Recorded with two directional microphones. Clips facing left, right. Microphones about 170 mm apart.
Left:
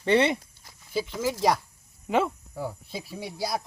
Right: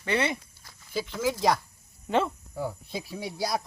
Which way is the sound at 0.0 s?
25° left (ahead or behind).